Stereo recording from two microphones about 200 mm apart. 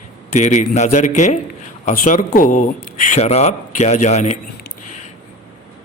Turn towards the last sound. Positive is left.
turn(degrees=35)  # may be behind; listen again after turning